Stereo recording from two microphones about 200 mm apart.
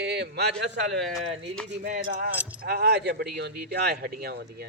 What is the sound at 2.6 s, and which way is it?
Speech, 55° right (ahead or behind).